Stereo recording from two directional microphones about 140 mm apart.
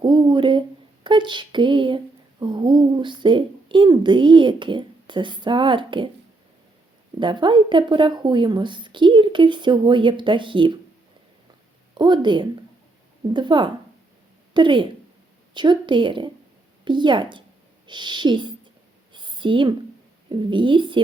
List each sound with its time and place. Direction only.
0.0 s a woman's voice: 30° right (ahead or behind)
7.2 s a woman's voice: 35° right (ahead or behind)
11.9 s a woman's voice: 30° right (ahead or behind)
19.1 s a sound: 35° right (ahead or behind)
20.3 s a woman's voice: 35° right (ahead or behind)